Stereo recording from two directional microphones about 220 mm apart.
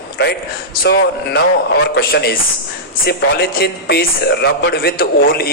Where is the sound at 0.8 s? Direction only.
45° left (ahead or behind).